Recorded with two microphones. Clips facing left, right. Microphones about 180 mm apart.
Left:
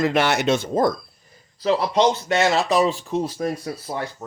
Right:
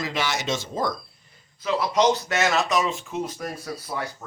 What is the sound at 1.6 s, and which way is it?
Speech, 30° left (ahead or behind).